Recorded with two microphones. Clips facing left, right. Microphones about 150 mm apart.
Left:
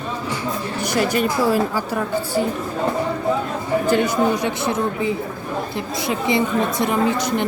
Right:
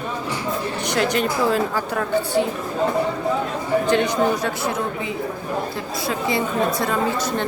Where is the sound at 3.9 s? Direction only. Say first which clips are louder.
Left 2 dB; 5° left (ahead or behind).